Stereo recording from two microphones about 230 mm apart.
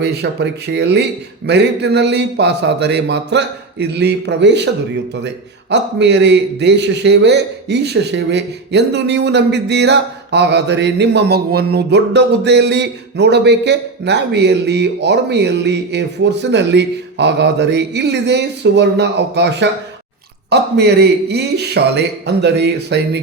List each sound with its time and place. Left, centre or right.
0.0 s a man's voice: right
5.7 s a man's voice: right